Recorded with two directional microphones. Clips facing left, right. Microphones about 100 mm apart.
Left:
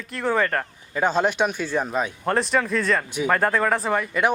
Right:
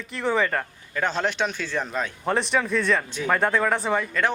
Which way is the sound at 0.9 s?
15° left (ahead or behind).